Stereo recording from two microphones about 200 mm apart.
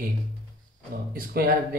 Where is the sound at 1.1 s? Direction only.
45° right (ahead or behind).